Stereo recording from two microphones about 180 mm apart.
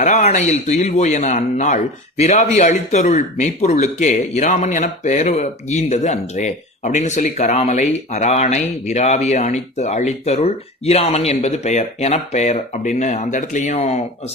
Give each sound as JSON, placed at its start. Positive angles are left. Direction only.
{"t": 0.0, "sound": "a man's voice", "side_deg": 40}